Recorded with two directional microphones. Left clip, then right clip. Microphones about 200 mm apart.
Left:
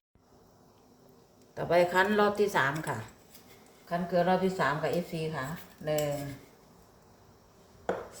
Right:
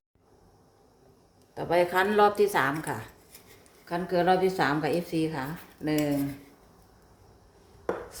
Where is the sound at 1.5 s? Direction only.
15° right (ahead or behind).